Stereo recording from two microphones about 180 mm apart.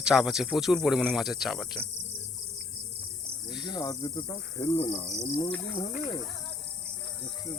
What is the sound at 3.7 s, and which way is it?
Speech, 25° left (ahead or behind).